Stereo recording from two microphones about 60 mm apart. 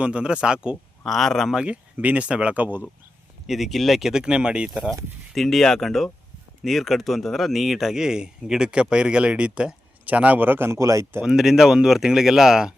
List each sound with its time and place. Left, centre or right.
0.0 s speech: centre
1.0 s speech: centre
1.5 s speech: centre
3.4 s speech: centre
5.3 s speech: centre; by 10.8 s right
10.8 s speech: right
11.2 s speech: centre